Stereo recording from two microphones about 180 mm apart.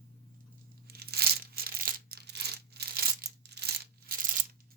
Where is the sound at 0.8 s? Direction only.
60° right (ahead or behind).